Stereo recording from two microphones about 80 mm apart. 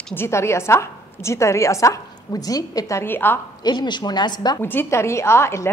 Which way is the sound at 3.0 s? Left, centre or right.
Left.